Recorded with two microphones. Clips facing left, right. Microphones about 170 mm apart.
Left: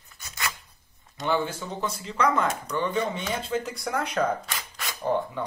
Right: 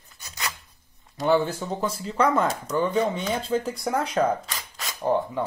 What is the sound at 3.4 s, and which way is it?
Speech, 30° right (ahead or behind).